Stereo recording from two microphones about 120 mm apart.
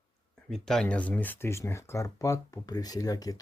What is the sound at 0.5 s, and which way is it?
Speech, 5° left (ahead or behind).